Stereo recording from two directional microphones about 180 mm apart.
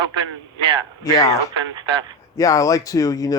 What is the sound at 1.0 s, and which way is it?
Speech, 20° left (ahead or behind).